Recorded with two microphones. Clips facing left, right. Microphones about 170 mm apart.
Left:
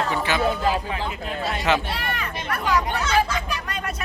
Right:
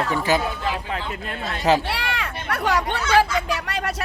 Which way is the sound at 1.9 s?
80° right.